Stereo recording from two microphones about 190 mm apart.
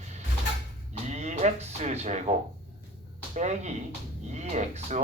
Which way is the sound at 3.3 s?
35° right (ahead or behind).